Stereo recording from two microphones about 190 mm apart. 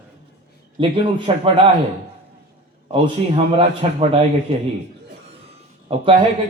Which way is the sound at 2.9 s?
30° right (ahead or behind).